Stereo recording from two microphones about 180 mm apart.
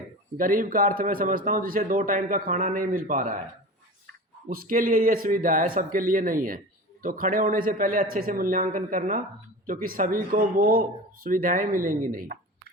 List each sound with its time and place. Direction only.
0.3 s speech: 50° right (ahead or behind)
4.4 s speech: 50° right (ahead or behind)